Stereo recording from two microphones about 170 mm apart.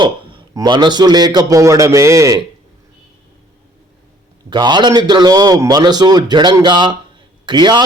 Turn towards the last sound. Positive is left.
turn(degrees=-25)  # may be behind; listen again after turning